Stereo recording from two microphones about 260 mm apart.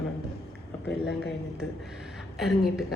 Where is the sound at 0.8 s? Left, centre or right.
Left.